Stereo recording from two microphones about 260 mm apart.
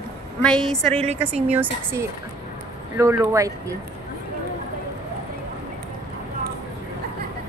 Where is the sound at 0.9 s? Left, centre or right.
Right.